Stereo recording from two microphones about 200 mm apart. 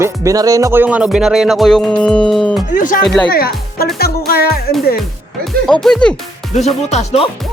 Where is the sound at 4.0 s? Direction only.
50° left (ahead or behind).